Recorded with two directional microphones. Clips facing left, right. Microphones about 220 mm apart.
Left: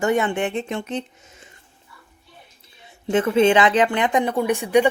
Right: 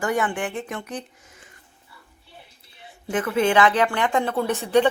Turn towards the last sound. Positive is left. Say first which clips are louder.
# left 2 dB
turn(degrees=15)  # may be behind; listen again after turning